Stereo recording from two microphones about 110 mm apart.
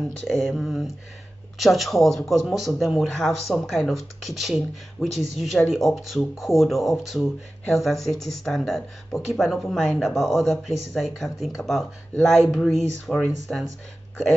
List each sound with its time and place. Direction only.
0.2 s speech: centre (ahead or behind)
5.0 s speech: 25° left (ahead or behind)
5.7 s speech: centre (ahead or behind)